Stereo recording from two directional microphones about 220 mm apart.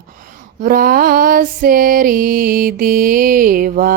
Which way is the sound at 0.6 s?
40° right (ahead or behind).